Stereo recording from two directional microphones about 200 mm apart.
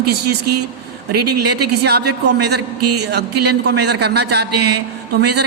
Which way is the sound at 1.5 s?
55° right (ahead or behind).